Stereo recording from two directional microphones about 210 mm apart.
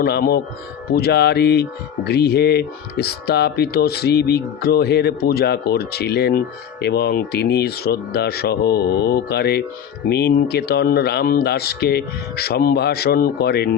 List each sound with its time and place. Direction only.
0.0 s speech: 45° left (ahead or behind)